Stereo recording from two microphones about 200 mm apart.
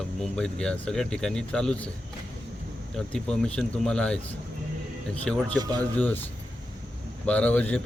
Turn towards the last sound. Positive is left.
turn(degrees=5)  # may be behind; listen again after turning